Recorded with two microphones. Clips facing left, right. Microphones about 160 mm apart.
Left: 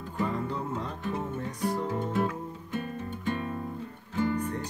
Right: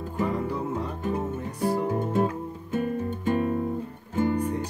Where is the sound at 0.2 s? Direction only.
10° right (ahead or behind).